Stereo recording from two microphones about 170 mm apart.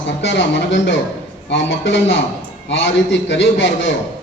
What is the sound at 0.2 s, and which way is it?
A man's voice, 90° left.